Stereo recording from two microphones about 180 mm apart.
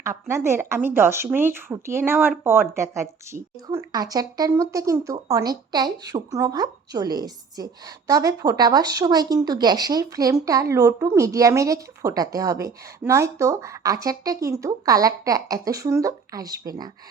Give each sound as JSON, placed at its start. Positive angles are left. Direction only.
{"t": 0.0, "sound": "a woman's voice", "side_deg": -15}